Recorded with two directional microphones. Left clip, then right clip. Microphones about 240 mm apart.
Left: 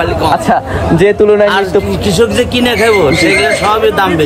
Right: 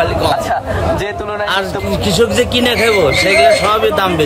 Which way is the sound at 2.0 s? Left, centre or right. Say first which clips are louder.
Left 2 dB; centre.